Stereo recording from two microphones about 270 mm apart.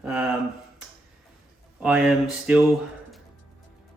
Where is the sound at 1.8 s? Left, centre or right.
Centre.